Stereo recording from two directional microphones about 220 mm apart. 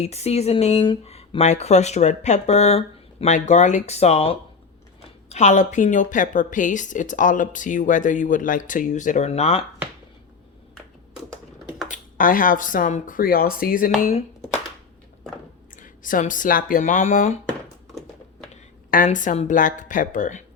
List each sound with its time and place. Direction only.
0.0 s a woman's voice: 30° left (ahead or behind)
11.9 s a woman's voice: 40° left (ahead or behind)
15.7 s speech: 35° left (ahead or behind)
18.9 s a woman's voice: 35° left (ahead or behind)